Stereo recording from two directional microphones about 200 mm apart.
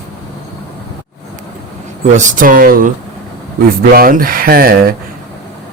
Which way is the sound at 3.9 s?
45° right (ahead or behind).